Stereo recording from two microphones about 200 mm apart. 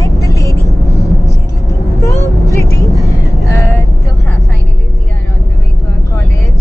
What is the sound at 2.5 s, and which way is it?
Vehicle, 15° left (ahead or behind).